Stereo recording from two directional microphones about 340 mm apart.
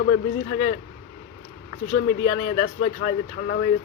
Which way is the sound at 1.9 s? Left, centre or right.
Left.